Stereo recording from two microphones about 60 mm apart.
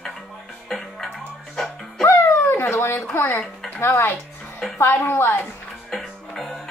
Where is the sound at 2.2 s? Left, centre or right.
Left.